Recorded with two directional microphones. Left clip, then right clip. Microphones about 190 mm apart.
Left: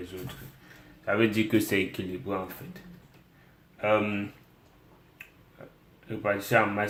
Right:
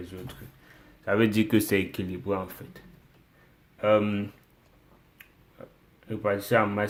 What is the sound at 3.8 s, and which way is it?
Speech, 55° right (ahead or behind).